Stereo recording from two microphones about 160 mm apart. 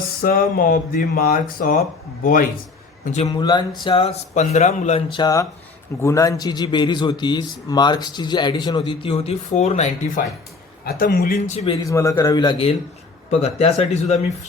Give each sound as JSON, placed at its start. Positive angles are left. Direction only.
{"t": 0.2, "sound": "speech", "side_deg": 65}
{"t": 3.0, "sound": "a man's voice", "side_deg": 45}
{"t": 3.2, "sound": "a man's voice", "side_deg": 25}
{"t": 4.4, "sound": "a man's voice", "side_deg": 45}
{"t": 5.1, "sound": "a man's voice", "side_deg": 25}
{"t": 10.8, "sound": "speech", "side_deg": 70}
{"t": 11.4, "sound": "speech", "side_deg": 35}
{"t": 11.9, "sound": "a man's voice", "side_deg": 20}
{"t": 13.4, "sound": "speech", "side_deg": 40}